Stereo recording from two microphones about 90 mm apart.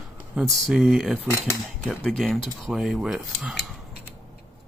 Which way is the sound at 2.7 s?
5° right (ahead or behind).